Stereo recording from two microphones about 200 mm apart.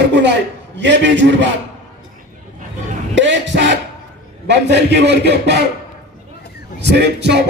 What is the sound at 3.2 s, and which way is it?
A man's voice, 65° right (ahead or behind).